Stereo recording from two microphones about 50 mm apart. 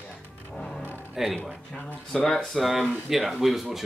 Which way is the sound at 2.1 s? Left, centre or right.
Centre.